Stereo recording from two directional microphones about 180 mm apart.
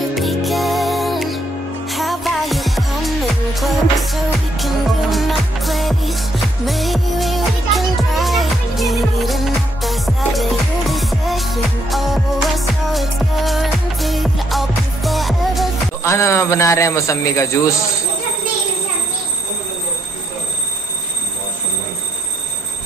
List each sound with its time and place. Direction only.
0.1 s music: centre (ahead or behind)
16.0 s a man's voice: 15° left (ahead or behind)